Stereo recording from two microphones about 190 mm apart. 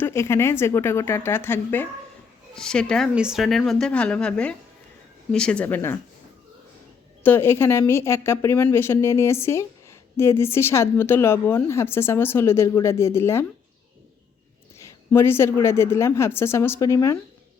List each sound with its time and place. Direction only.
0.0 s a woman's voice: 15° left (ahead or behind)
7.2 s speech: 10° left (ahead or behind)
15.1 s speech: 10° left (ahead or behind)